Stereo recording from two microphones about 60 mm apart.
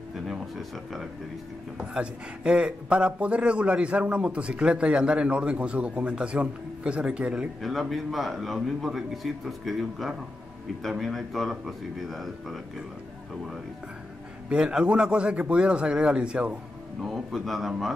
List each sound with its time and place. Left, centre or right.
0.3 s a man's voice: centre
1.8 s a man's voice: centre
7.9 s a man's voice: centre
14.5 s speech: centre
17.0 s a man's voice: centre